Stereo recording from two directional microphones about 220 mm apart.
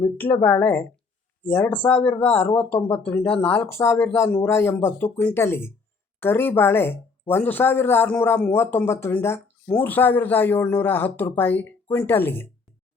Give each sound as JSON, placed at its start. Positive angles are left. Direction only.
{"t": 0.0, "sound": "speech", "side_deg": 10}